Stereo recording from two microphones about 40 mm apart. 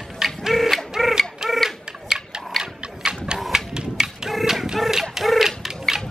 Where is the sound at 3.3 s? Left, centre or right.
Centre.